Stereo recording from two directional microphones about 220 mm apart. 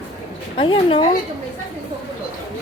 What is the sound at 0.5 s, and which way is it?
Speech, 25° left (ahead or behind).